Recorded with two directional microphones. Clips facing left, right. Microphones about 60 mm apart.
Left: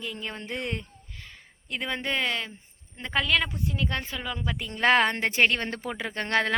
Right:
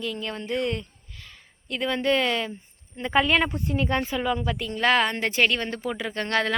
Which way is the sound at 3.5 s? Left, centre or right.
Right.